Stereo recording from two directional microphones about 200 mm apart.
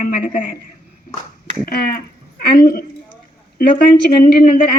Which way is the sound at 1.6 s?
45° left (ahead or behind).